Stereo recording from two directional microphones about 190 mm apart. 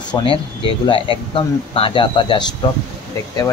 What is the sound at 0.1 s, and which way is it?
Speech, 25° left (ahead or behind).